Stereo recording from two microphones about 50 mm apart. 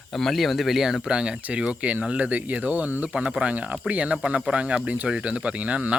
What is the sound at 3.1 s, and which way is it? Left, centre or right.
Speech, right.